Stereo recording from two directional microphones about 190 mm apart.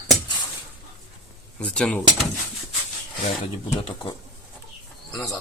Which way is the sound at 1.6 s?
5° left (ahead or behind).